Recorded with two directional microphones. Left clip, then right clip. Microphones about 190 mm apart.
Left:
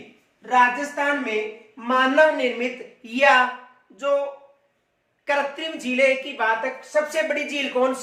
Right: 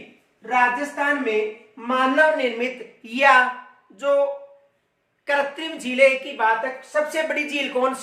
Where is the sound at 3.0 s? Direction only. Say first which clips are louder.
Right 1 dB; 20° right (ahead or behind).